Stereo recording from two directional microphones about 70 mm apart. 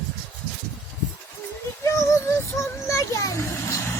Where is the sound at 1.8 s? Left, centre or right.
Left.